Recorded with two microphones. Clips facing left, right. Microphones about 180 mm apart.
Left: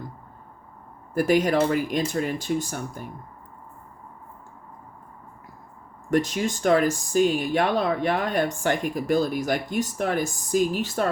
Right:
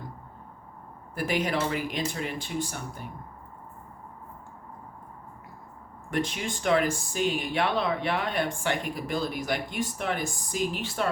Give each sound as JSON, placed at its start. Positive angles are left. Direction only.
{"t": 1.1, "sound": "speech", "side_deg": 45}
{"t": 6.1, "sound": "speech", "side_deg": 45}